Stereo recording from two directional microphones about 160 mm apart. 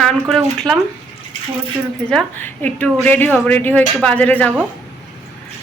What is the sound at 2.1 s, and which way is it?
A woman's voice, 5° left (ahead or behind).